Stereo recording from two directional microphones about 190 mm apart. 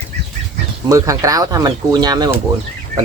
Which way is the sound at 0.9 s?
15° right (ahead or behind).